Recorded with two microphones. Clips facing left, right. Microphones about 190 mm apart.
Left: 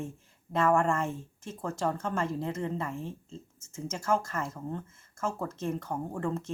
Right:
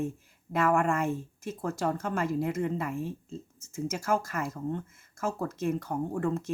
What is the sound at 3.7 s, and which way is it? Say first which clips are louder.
Speech: right 4 dB; 25° left (ahead or behind).